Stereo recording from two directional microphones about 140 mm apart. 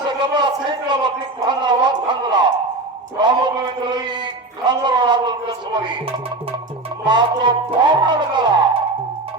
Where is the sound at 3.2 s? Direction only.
30° right (ahead or behind).